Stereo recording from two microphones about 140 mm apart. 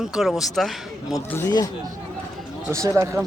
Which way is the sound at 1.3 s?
15° left (ahead or behind).